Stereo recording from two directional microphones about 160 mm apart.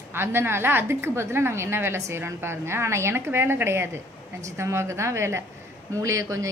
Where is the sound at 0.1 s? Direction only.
15° right (ahead or behind).